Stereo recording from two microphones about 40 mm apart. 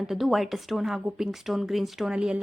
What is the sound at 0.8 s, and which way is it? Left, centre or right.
A woman's voice, centre.